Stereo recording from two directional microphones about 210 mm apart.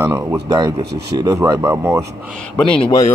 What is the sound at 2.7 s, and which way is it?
Speech, 25° left (ahead or behind).